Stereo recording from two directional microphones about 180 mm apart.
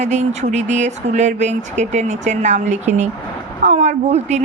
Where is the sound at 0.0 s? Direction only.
40° right (ahead or behind).